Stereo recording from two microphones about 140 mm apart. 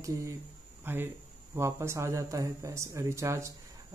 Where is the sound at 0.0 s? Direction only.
20° right (ahead or behind).